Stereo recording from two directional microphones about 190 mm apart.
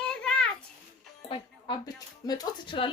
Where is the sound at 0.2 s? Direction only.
5° left (ahead or behind).